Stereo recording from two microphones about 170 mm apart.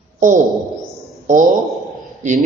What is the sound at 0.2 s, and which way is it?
A woman's voice, 50° right (ahead or behind).